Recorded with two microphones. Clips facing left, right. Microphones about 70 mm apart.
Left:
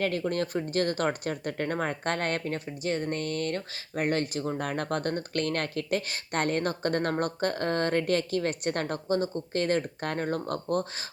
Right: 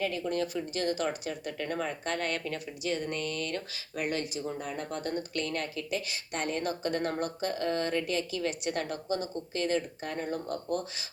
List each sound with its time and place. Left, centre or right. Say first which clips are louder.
0.0 s speech: left 3 dB; left